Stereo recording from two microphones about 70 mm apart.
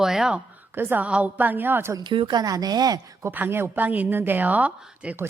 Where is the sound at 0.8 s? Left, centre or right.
Right.